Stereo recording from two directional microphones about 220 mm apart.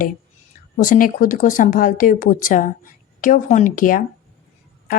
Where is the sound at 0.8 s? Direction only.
40° left (ahead or behind).